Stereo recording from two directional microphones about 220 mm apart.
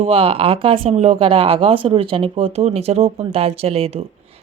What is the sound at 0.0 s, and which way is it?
Speech, 25° right (ahead or behind).